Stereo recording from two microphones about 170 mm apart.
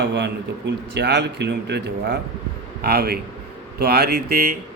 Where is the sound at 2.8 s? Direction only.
65° right (ahead or behind).